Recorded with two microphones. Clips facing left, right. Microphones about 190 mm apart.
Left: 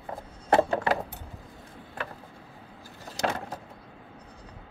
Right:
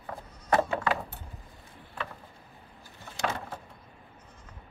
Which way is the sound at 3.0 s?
40° left (ahead or behind).